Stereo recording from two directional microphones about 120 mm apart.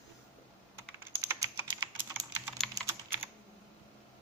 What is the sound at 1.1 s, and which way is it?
Typing, 25° right (ahead or behind).